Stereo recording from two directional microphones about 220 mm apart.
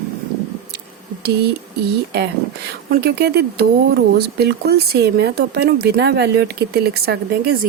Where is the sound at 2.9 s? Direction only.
50° right (ahead or behind).